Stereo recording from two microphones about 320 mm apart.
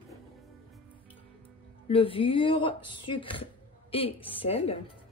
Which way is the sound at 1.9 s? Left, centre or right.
Centre.